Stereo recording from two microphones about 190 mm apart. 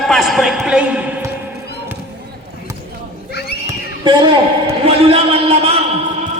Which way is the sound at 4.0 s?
25° right (ahead or behind).